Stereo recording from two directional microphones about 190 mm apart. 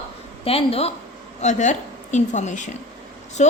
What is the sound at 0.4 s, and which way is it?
A woman's voice, 30° left (ahead or behind).